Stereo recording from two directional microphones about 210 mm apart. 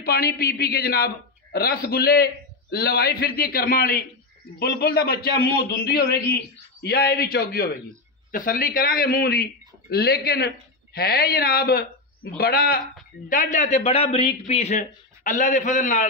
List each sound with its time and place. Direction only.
0.0 s a man's voice: 45° left (ahead or behind)